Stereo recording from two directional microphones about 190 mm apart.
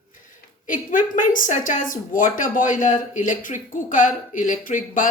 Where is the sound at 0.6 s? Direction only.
45° left (ahead or behind).